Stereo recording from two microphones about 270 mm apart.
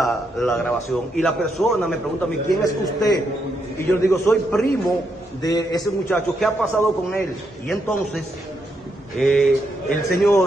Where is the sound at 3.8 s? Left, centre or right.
Centre.